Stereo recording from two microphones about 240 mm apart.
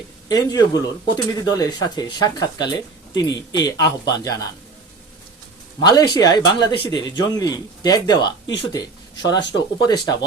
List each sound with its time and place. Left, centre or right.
0.3 s speech: centre
5.8 s speech: centre